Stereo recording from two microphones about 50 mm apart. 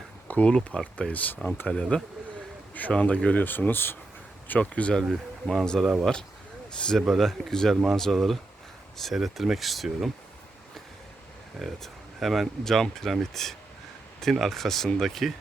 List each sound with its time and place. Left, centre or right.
0.3 s speech: left
0.7 s speech: centre
1.1 s speech: left
4.7 s speech: left
5.5 s speech: centre
5.8 s speech: centre
6.7 s speech: centre
7.1 s speech: centre
11.6 s speech: centre